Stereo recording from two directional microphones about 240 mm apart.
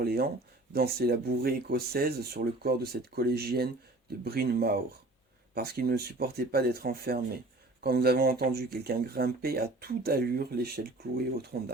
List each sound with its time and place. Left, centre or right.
0.0 s speech: right